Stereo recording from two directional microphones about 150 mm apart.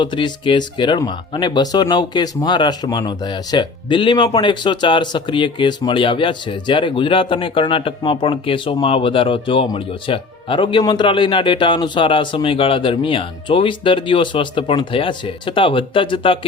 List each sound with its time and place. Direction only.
0.0 s speech: 30° left (ahead or behind)